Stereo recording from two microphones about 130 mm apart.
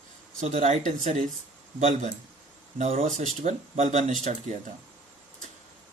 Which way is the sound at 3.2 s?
65° right (ahead or behind).